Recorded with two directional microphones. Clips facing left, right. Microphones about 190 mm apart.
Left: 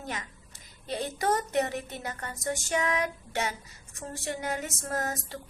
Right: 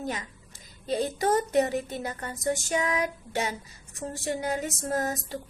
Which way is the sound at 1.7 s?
25° right (ahead or behind).